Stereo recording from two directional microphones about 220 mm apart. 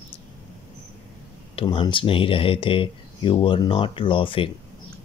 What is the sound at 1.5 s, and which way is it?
Speech, 20° left (ahead or behind).